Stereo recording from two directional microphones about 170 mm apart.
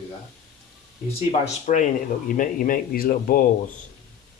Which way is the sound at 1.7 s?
45° left (ahead or behind).